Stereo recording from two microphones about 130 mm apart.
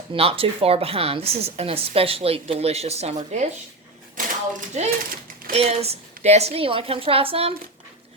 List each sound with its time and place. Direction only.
0.1 s a woman's voice: 45° right (ahead or behind)
4.7 s a child's voice: 60° right (ahead or behind)